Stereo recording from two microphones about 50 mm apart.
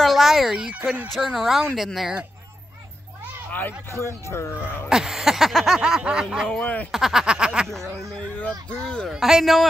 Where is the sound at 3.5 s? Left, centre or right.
Left.